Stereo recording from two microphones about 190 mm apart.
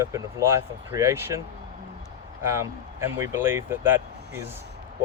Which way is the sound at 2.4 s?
15° right (ahead or behind).